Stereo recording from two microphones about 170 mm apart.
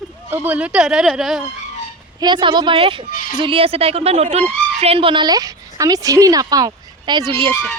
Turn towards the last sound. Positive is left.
turn(degrees=-25)  # may be behind; listen again after turning